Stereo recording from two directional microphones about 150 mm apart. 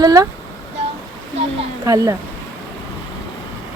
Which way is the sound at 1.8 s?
20° right (ahead or behind).